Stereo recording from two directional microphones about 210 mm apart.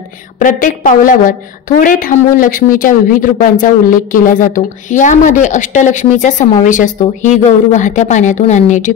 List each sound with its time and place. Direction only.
0.4 s a woman's voice: 40° left (ahead or behind)